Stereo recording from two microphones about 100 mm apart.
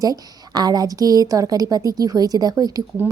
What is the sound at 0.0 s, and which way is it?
A woman's voice, 40° right (ahead or behind).